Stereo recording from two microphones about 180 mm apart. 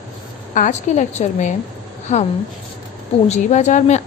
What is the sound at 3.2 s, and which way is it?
Speech, 40° left (ahead or behind).